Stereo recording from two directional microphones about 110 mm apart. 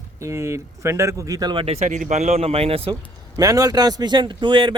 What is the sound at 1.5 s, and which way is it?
Speech, 65° right (ahead or behind).